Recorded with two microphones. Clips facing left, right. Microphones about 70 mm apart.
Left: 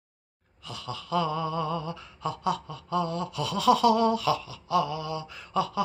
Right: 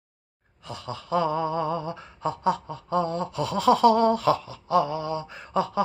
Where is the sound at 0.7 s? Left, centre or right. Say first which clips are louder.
Right 3 dB; right.